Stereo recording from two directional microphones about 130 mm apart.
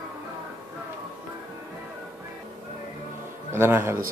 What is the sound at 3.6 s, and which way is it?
Speech, 20° right (ahead or behind).